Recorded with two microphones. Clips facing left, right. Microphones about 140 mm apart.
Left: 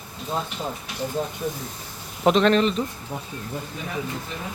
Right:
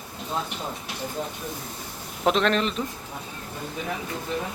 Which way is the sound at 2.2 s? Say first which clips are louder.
Left 4 dB; centre (ahead or behind).